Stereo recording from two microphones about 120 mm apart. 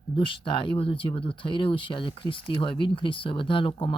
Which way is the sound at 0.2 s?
45° left (ahead or behind).